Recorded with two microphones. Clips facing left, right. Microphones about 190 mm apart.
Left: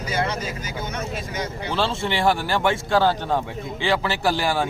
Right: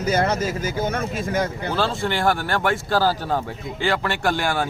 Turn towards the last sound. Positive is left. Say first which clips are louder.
# even
turn(degrees=0)  # may be behind; listen again after turning